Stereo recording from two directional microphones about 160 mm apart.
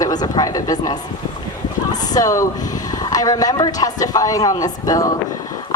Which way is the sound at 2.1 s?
20° left (ahead or behind).